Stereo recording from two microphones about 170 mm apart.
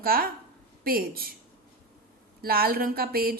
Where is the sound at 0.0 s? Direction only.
60° right (ahead or behind).